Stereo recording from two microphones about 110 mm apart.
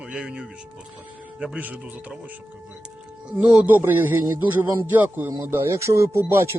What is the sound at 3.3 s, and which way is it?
A man's voice, 10° right (ahead or behind).